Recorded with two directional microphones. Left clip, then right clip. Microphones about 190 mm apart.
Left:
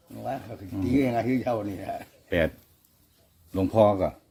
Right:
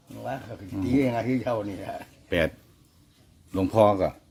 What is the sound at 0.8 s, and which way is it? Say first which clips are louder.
Speech: even; 20° right (ahead or behind).